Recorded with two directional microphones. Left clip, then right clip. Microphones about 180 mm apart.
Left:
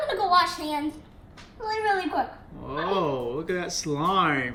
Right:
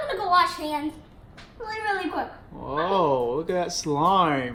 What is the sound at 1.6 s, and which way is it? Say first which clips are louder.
Speech: left 2 dB; 30° left (ahead or behind).